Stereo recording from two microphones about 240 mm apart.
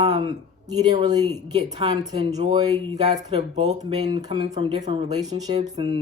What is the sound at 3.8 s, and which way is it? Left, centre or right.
Speech, centre.